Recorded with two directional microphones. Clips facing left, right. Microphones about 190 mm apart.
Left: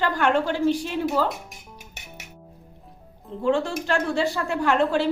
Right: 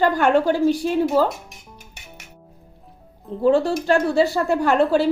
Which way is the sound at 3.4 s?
35° right (ahead or behind).